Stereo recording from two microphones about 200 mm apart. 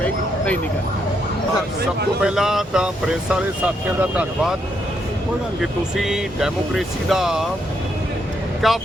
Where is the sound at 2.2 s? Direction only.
Centre (ahead or behind).